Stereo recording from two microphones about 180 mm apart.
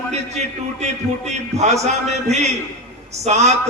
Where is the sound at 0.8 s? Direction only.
40° right (ahead or behind).